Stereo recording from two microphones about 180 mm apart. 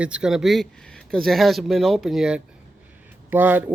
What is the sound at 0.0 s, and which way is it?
Speech, 5° right (ahead or behind).